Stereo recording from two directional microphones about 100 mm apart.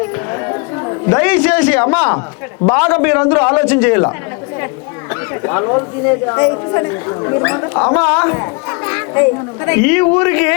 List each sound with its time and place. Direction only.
0.0 s a sound: 25° left (ahead or behind)
2.6 s speech: 20° left (ahead or behind)
5.3 s speech: 25° left (ahead or behind)